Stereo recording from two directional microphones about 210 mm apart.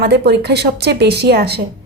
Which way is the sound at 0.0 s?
50° right (ahead or behind).